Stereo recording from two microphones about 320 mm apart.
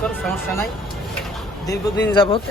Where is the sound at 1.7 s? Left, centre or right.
Centre.